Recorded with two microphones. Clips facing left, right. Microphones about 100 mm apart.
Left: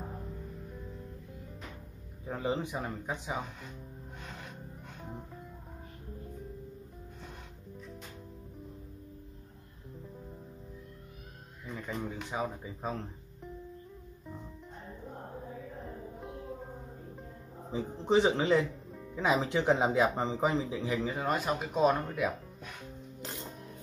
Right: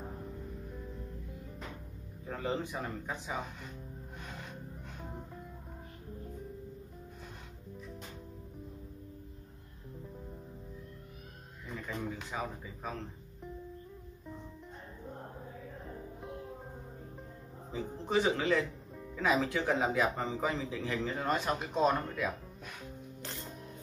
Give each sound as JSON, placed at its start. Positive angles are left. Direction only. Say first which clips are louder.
{"t": 2.2, "sound": "speech", "louder": "left 2 dB", "side_deg": 15}
{"t": 12.3, "sound": "speech", "louder": "left 3 dB", "side_deg": 25}
{"t": 18.0, "sound": "speech", "louder": "left 4 dB", "side_deg": 25}